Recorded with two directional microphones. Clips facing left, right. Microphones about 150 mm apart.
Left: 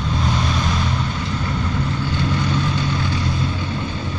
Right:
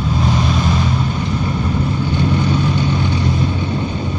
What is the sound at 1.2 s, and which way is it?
Vehicle, 15° right (ahead or behind).